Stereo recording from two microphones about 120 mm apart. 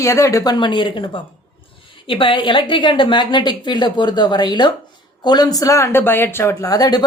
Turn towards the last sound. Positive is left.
turn(degrees=35)  # may be behind; listen again after turning